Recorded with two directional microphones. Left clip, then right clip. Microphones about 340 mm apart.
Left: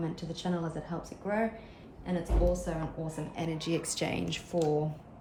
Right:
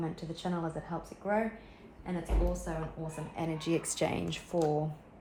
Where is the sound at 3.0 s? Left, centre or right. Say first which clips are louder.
Left 1 dB; centre.